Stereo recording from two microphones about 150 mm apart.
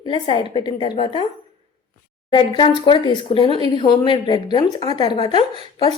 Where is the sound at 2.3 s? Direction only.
35° left (ahead or behind).